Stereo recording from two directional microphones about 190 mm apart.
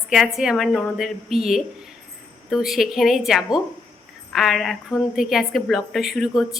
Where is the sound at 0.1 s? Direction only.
Centre (ahead or behind).